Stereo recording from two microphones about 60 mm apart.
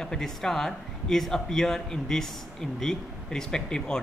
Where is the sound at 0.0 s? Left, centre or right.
Centre.